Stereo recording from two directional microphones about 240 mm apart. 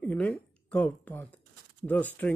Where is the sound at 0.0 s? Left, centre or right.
Centre.